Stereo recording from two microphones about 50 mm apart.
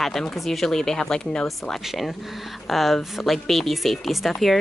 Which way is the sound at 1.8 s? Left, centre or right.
Centre.